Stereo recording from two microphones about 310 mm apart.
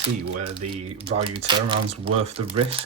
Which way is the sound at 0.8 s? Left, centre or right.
Centre.